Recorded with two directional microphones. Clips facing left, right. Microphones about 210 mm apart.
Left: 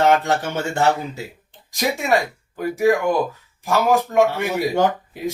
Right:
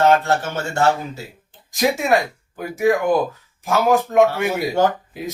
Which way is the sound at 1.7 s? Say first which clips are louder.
Right 2 dB; centre (ahead or behind).